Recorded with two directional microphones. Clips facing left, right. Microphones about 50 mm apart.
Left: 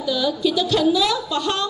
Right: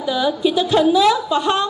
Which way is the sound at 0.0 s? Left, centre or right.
Right.